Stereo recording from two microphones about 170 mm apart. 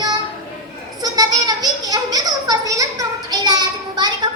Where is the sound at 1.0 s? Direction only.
20° right (ahead or behind).